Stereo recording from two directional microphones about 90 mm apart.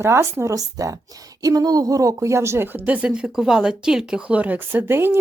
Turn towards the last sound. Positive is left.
turn(degrees=-25)  # may be behind; listen again after turning